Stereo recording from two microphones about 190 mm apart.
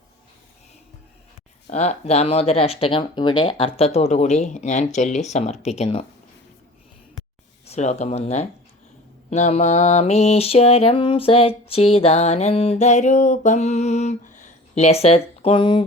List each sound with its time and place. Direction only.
1.6 s mantra: 35° left (ahead or behind)
7.7 s mantra: 35° left (ahead or behind)